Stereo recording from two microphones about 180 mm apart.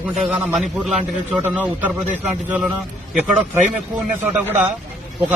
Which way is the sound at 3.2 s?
10° right (ahead or behind).